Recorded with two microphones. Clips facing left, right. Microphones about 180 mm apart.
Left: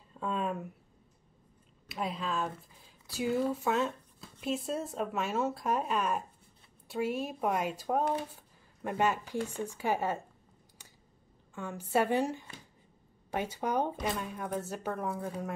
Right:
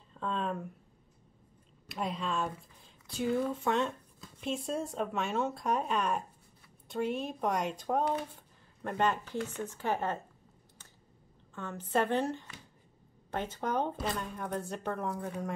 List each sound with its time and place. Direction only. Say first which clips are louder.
0.1 s a sound: left 1 dB; 10° left (ahead or behind)
1.9 s a woman's voice: even; centre (ahead or behind)
11.5 s a woman's voice: left 1 dB; 10° left (ahead or behind)